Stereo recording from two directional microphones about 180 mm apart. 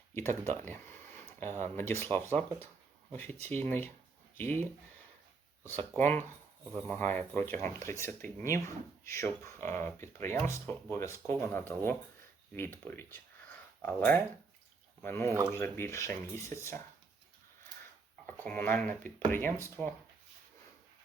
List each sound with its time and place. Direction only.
0.1 s speech: 10° left (ahead or behind)
3.2 s speech: 35° right (ahead or behind)
3.5 s speech: 10° left (ahead or behind)
6.0 s speech: 10° left (ahead or behind)
18.4 s speech: 10° left (ahead or behind)
19.8 s speech: centre (ahead or behind)